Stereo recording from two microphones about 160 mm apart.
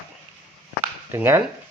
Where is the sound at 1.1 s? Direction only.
15° right (ahead or behind).